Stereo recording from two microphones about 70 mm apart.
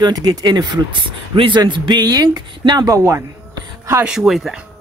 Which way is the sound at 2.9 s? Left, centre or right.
Right.